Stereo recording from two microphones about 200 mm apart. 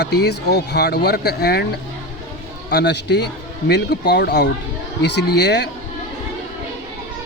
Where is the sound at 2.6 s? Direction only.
55° left (ahead or behind).